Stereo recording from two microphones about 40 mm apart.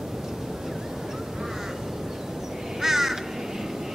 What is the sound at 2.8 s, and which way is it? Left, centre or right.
Crow, centre.